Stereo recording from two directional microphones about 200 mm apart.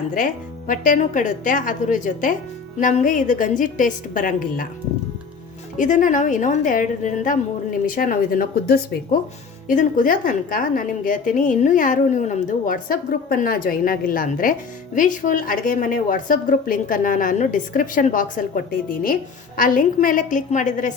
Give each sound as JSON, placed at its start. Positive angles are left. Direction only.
{"t": 0.7, "sound": "a woman's voice", "side_deg": 40}
{"t": 5.7, "sound": "a woman's voice", "side_deg": 40}